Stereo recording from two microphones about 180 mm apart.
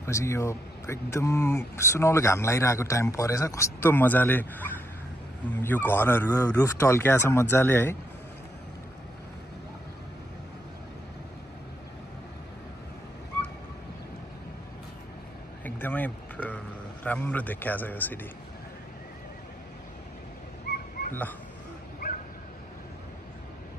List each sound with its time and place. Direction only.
0.0 s speech: 15° left (ahead or behind)
15.6 s a sound: 10° left (ahead or behind)
20.7 s dog: 65° left (ahead or behind)
21.1 s speech: 10° left (ahead or behind)